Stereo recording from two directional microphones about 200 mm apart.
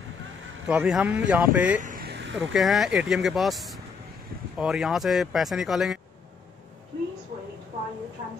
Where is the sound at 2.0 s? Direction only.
60° right (ahead or behind).